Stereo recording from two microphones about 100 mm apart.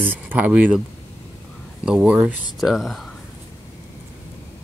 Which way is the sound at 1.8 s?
10° right (ahead or behind).